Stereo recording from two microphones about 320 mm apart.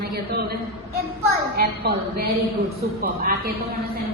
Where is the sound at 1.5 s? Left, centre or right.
Right.